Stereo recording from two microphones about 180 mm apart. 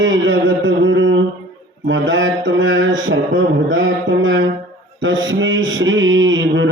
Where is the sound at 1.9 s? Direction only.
90° right.